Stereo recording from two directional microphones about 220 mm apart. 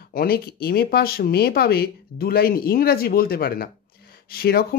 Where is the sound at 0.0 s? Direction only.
45° left (ahead or behind).